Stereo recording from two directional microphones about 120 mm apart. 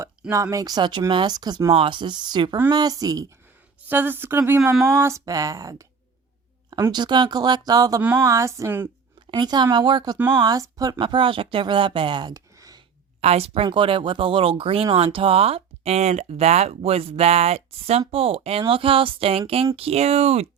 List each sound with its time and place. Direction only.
0.3 s speech: 25° right (ahead or behind)
1.7 s speech: 45° right (ahead or behind)
3.8 s speech: 15° right (ahead or behind)
4.7 s speech: 5° right (ahead or behind)
4.9 s speech: 25° right (ahead or behind)
9.3 s speech: 35° right (ahead or behind)
11.0 s speech: 45° right (ahead or behind)
13.2 s speech: 55° right (ahead or behind)
13.7 s speech: 45° right (ahead or behind)